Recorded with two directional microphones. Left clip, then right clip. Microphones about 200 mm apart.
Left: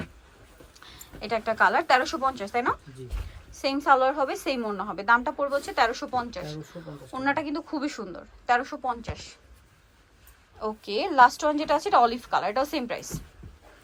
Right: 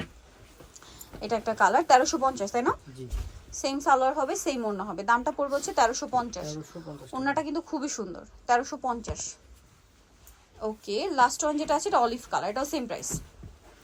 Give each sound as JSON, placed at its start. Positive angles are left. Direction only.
{"t": 0.7, "sound": "a sound", "side_deg": -20}
{"t": 1.5, "sound": "a woman's voice", "side_deg": -20}
{"t": 10.6, "sound": "a woman's voice", "side_deg": -10}